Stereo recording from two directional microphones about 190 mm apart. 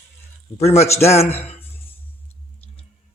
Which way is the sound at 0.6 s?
35° left (ahead or behind).